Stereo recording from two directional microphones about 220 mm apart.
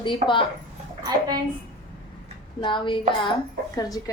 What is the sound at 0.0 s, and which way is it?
Speech, 20° left (ahead or behind).